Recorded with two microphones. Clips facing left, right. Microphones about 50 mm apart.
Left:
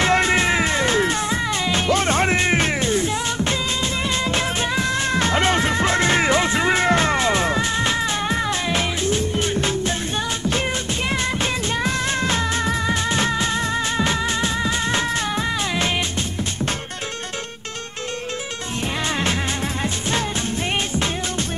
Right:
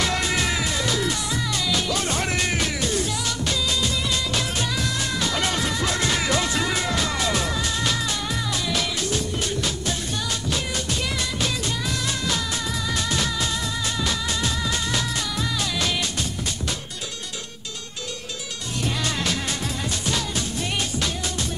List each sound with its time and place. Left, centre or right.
0.0 s music: left
11.1 s music: left
19.8 s music: left